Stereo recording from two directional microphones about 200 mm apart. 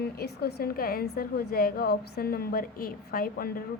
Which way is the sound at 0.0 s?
50° left (ahead or behind).